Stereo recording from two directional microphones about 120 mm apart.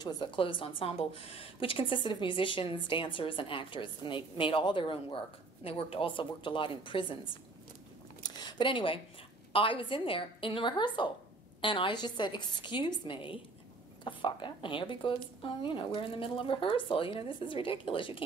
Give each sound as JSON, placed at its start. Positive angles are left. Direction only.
{"t": 0.0, "sound": "a woman's voice", "side_deg": 40}
{"t": 8.2, "sound": "a sound", "side_deg": 35}
{"t": 9.5, "sound": "a woman's voice", "side_deg": 45}